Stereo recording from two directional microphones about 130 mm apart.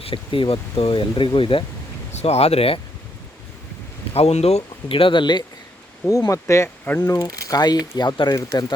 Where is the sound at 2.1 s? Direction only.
55° left (ahead or behind).